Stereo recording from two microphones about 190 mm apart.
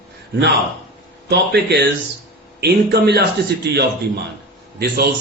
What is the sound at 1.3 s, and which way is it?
A man's voice, 60° right (ahead or behind).